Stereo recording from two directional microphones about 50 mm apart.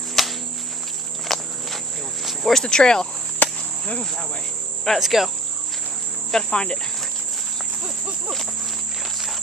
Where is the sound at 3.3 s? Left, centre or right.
Left.